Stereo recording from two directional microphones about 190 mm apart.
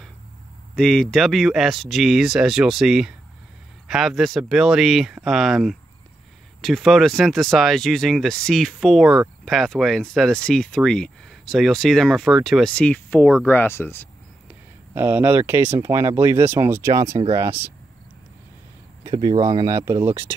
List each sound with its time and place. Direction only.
0.7 s speech: centre (ahead or behind)
14.5 s speech: 10° right (ahead or behind)
19.0 s speech: 25° right (ahead or behind)